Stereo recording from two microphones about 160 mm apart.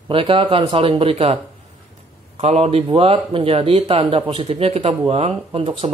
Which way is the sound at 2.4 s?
45° right (ahead or behind).